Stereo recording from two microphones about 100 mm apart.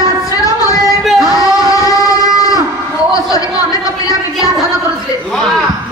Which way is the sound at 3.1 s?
35° left (ahead or behind).